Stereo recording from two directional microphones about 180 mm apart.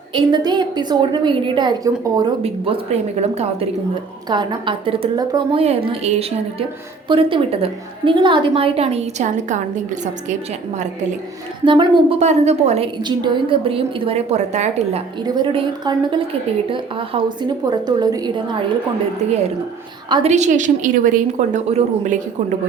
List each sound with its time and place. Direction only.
0.1 s a woman's voice: 25° right (ahead or behind)
2.4 s a woman's voice: 30° right (ahead or behind)
4.3 s a woman's voice: 25° right (ahead or behind); by 10.3 s 45° right (ahead or behind)
11.6 s a woman's voice: 25° right (ahead or behind)
12.2 s a woman's voice: 40° right (ahead or behind)
13.0 s a woman's voice: 25° right (ahead or behind)
15.4 s a woman's voice: 25° right (ahead or behind)
20.2 s a woman's voice: 40° right (ahead or behind)